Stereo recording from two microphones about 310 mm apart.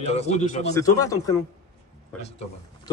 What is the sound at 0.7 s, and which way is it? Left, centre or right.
Speech, centre.